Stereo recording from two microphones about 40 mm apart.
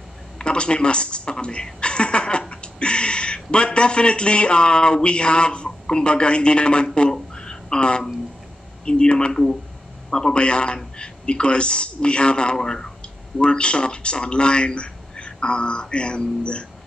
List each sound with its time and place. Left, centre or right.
0.4 s a woman's voice: left
7.0 s a sound: centre
8.8 s speech: left
13.4 s a man's voice: left